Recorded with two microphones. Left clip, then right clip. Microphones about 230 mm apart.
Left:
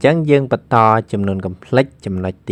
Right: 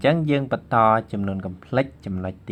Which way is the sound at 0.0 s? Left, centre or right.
Left.